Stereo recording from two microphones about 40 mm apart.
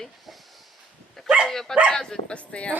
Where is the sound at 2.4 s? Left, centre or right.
Left.